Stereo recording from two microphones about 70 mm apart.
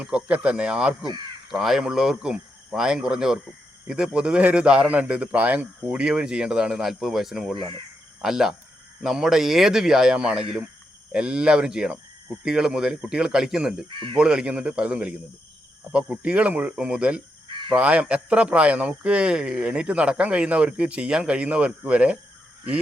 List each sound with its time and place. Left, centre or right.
0.0 s speech: centre